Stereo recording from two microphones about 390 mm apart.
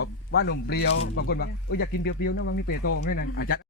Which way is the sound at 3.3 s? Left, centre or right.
Left.